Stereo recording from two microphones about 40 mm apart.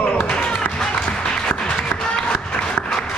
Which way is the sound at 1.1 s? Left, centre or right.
Left.